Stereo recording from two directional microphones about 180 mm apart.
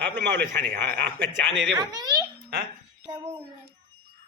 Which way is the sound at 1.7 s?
20° right (ahead or behind).